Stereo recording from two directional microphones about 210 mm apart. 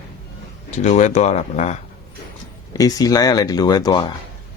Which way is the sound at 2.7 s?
15° left (ahead or behind).